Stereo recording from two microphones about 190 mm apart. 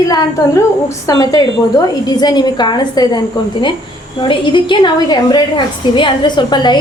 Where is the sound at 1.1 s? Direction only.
20° left (ahead or behind).